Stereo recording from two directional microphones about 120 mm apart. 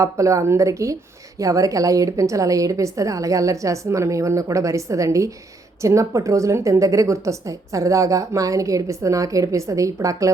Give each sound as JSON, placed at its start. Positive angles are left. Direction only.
{"t": 0.0, "sound": "speech", "side_deg": -25}